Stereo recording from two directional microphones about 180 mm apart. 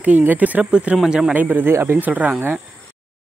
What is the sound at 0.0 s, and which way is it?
Speech, 10° right (ahead or behind).